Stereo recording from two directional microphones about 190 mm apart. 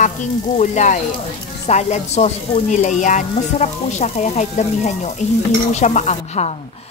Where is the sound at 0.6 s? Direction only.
40° left (ahead or behind).